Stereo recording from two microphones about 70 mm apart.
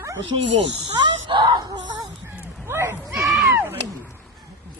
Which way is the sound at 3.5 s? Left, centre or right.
Right.